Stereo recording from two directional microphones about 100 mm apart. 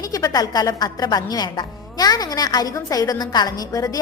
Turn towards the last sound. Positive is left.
turn(degrees=35)  # may be behind; listen again after turning